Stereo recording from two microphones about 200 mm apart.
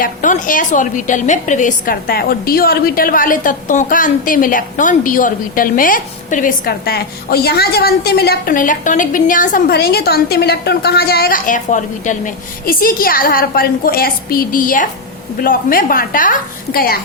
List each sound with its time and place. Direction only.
0.0 s a woman's voice: 40° left (ahead or behind)